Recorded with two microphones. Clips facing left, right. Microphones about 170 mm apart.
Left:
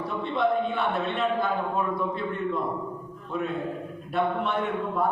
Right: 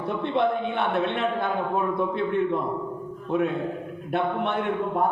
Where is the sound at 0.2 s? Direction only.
60° right (ahead or behind).